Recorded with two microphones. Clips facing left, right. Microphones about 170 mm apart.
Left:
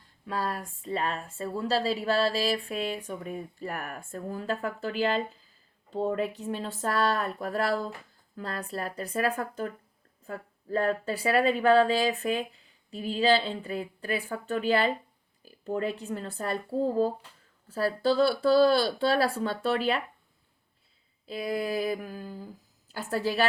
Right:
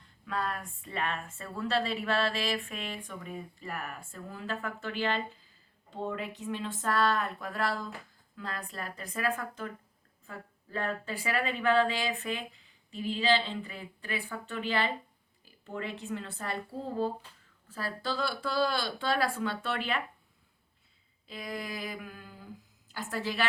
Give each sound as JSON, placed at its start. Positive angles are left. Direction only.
{"t": 0.3, "sound": "a woman's voice", "side_deg": 35}
{"t": 21.2, "sound": "a woman's voice", "side_deg": 40}